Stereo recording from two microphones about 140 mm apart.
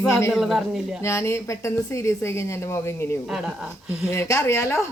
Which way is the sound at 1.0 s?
20° left (ahead or behind).